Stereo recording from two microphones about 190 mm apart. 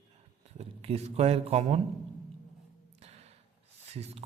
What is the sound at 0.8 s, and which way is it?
Speech, 35° right (ahead or behind).